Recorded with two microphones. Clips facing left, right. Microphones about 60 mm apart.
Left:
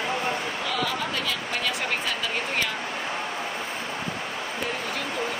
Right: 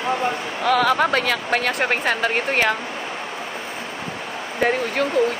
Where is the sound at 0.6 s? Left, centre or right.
Right.